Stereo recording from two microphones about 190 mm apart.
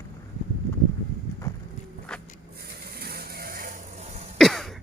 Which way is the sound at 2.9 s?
55° right (ahead or behind).